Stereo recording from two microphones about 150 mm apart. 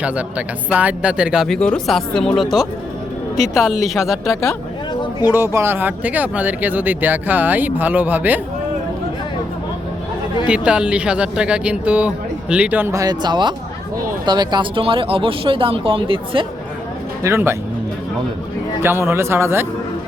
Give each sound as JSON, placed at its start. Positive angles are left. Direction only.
{"t": 0.0, "sound": "speech", "side_deg": -10}
{"t": 4.3, "sound": "speech", "side_deg": 20}
{"t": 5.3, "sound": "speech", "side_deg": -15}
{"t": 10.4, "sound": "speech", "side_deg": -5}
{"t": 17.2, "sound": "speech", "side_deg": -15}
{"t": 18.8, "sound": "speech", "side_deg": -15}